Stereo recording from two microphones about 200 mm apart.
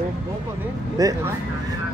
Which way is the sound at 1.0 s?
15° right (ahead or behind).